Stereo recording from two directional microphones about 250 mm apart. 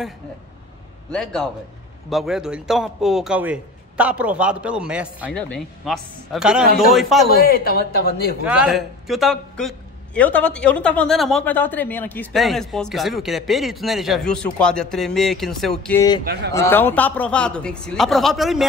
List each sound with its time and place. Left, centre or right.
1.1 s a man's voice: centre
7.4 s speech: left
8.5 s a man's voice: centre